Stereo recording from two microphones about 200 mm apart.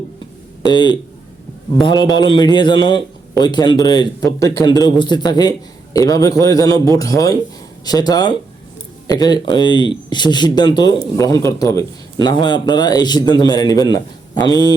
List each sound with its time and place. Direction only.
0.6 s a man's voice: 20° left (ahead or behind)